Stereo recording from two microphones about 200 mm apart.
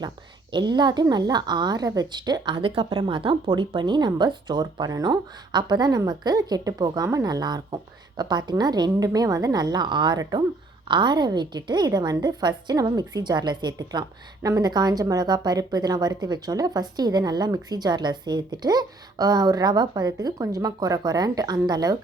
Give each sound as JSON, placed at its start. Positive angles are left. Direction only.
{"t": 0.5, "sound": "a woman's voice", "side_deg": -20}